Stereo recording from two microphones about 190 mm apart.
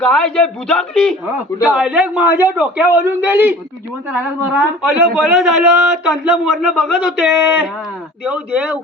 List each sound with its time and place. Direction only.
0.0 s a man's voice: 5° left (ahead or behind)
4.5 s a man's voice: 5° right (ahead or behind)